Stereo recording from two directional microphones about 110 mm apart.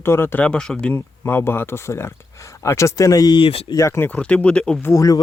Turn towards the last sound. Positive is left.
turn(degrees=30)  # may be behind; listen again after turning